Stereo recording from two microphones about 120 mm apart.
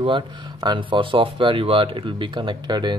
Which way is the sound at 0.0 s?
40° right (ahead or behind).